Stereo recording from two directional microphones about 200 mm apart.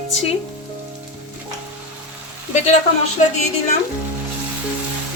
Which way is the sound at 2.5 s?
35° left (ahead or behind).